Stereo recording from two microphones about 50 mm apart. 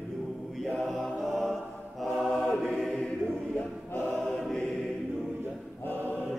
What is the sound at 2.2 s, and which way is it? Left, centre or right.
Choir, centre.